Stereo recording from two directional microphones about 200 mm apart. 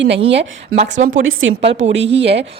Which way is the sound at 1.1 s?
75° right (ahead or behind).